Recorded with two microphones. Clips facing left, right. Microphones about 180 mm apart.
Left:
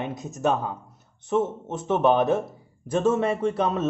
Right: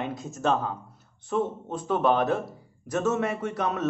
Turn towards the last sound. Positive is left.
turn(degrees=25)  # may be behind; listen again after turning